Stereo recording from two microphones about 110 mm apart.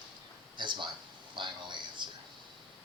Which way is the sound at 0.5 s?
45° right (ahead or behind).